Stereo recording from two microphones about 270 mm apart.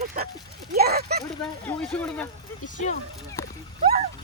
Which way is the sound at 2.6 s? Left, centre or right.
Left.